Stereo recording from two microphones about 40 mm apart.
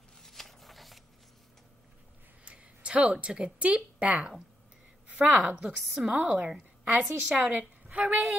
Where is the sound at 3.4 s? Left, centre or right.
Right.